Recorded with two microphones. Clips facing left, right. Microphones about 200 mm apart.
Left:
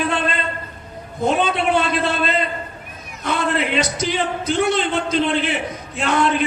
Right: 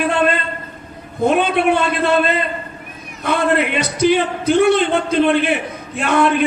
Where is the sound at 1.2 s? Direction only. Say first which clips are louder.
Right 4 dB; 60° right (ahead or behind).